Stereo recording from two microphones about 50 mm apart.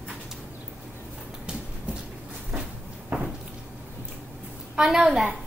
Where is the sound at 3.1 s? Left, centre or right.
Right.